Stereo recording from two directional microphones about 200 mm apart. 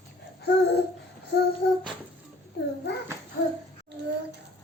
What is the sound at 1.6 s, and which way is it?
Child singing, 55° left (ahead or behind).